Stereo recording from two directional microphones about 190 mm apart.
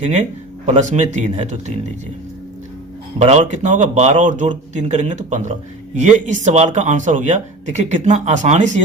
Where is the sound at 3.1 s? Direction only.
35° right (ahead or behind).